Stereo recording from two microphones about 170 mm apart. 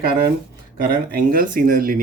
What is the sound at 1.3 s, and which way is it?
Speech, 55° right (ahead or behind).